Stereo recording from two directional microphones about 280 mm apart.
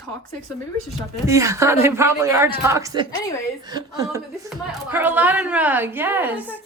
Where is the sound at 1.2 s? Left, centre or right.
Centre.